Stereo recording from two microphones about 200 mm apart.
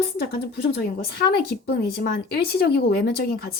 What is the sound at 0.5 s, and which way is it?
Speech, 55° left (ahead or behind).